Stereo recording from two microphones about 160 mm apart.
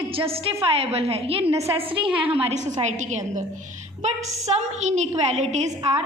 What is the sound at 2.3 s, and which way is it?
A woman's voice, 45° right (ahead or behind).